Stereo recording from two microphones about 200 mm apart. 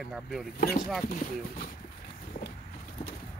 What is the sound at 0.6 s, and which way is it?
Speech, 45° left (ahead or behind).